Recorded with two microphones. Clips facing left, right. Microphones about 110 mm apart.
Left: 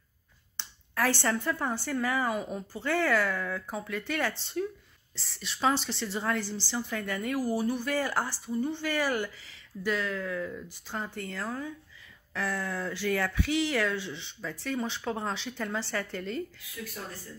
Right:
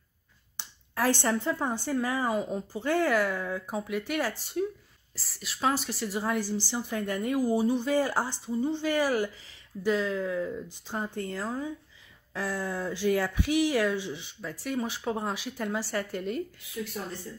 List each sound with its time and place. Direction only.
0.6 s speech: 15° right (ahead or behind)
16.8 s speech: 25° right (ahead or behind)